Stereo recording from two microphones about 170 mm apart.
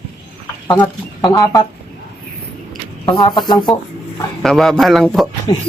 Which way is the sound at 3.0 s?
25° left (ahead or behind).